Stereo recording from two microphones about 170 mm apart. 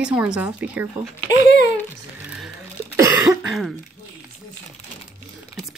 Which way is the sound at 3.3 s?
Centre (ahead or behind).